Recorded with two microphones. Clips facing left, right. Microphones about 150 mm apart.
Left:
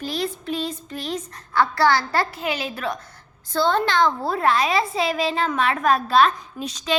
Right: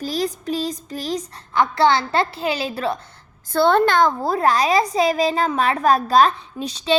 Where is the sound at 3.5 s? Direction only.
60° right (ahead or behind).